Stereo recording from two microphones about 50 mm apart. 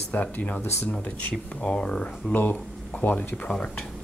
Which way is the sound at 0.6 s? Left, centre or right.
Left.